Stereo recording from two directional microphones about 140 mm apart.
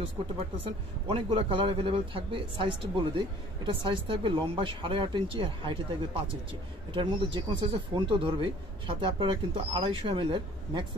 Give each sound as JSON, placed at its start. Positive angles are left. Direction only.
{"t": 1.1, "sound": "speech", "side_deg": -45}